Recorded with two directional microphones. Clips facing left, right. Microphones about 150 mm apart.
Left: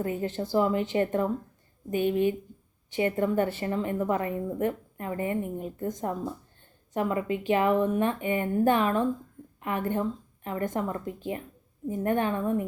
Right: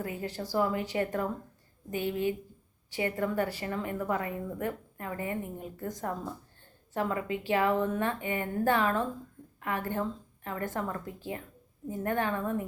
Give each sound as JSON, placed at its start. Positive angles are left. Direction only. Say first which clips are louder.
{"t": 0.0, "sound": "a woman's voice", "louder": "left 6 dB", "side_deg": 30}